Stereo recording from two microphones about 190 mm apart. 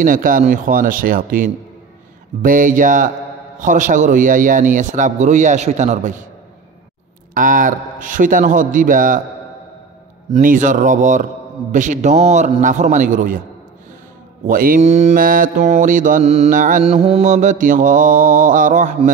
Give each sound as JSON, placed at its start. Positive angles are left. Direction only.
{"t": 0.0, "sound": "mantra", "side_deg": -45}
{"t": 3.5, "sound": "a man's voice", "side_deg": -40}
{"t": 7.3, "sound": "mantra", "side_deg": -45}
{"t": 10.3, "sound": "mantra", "side_deg": -45}
{"t": 11.7, "sound": "a man's voice", "side_deg": -40}
{"t": 14.5, "sound": "mantra", "side_deg": -45}
{"t": 16.8, "sound": "mantra", "side_deg": -30}